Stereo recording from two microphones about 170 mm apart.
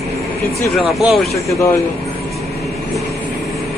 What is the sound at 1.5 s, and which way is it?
Speech, 20° left (ahead or behind).